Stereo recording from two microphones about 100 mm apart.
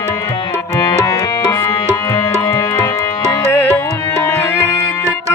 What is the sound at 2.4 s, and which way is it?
Music, 40° left (ahead or behind).